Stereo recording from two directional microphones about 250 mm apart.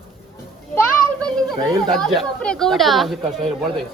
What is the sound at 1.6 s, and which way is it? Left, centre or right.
Speech, centre.